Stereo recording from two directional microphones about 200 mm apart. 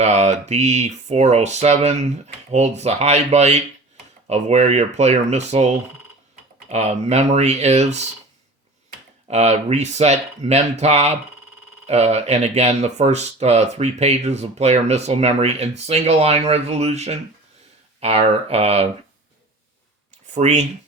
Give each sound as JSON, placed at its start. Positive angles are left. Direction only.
{"t": 0.0, "sound": "speech", "side_deg": -35}
{"t": 9.2, "sound": "speech", "side_deg": -35}
{"t": 20.3, "sound": "speech", "side_deg": -35}